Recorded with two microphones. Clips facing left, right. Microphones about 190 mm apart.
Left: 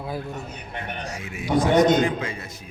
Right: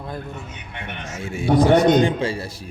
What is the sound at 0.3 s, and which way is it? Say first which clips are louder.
Speech: left 2 dB; 35° left (ahead or behind).